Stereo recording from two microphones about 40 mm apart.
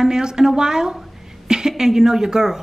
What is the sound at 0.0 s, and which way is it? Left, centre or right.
Speech, centre.